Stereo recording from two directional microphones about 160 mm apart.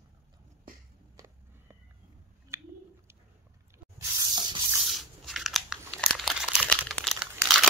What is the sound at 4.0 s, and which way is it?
Sanding, 25° right (ahead or behind).